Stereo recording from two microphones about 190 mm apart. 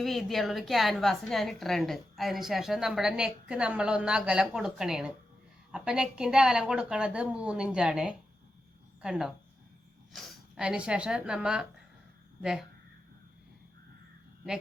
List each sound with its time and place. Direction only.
0.0 s a woman's voice: centre (ahead or behind)